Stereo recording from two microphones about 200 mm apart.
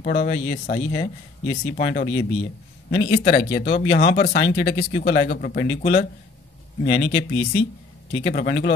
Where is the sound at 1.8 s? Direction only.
35° left (ahead or behind).